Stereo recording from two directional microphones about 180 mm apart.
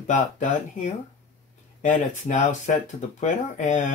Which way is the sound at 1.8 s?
40° left (ahead or behind).